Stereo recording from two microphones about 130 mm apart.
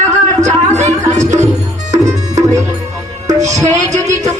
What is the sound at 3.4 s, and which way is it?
Music, 25° right (ahead or behind).